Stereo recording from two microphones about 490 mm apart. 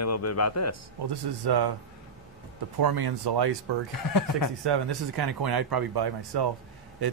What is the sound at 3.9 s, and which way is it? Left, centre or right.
Speech, left.